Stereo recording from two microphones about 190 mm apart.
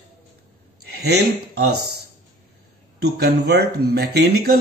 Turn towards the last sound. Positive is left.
turn(degrees=-55)  # may be behind; listen again after turning